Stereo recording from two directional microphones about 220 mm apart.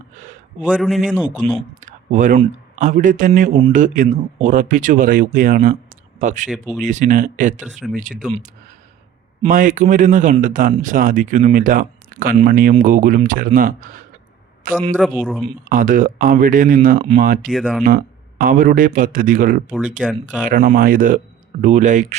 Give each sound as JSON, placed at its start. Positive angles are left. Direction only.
{"t": 0.6, "sound": "a man's voice", "side_deg": -5}
{"t": 1.8, "sound": "a man's voice", "side_deg": -35}
{"t": 6.5, "sound": "a man's voice", "side_deg": -5}
{"t": 6.8, "sound": "a man's voice", "side_deg": -35}
{"t": 9.4, "sound": "a man's voice", "side_deg": -35}
{"t": 14.9, "sound": "a man's voice", "side_deg": -5}
{"t": 15.4, "sound": "a man's voice", "side_deg": -35}
{"t": 17.4, "sound": "a man's voice", "side_deg": 5}
{"t": 17.8, "sound": "a man's voice", "side_deg": -40}